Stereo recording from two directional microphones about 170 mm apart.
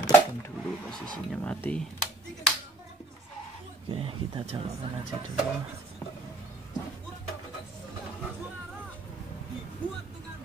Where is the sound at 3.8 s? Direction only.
30° right (ahead or behind).